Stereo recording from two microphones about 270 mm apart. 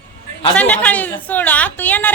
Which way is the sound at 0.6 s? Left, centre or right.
Centre.